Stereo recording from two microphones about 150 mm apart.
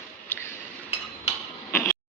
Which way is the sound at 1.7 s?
15° left (ahead or behind).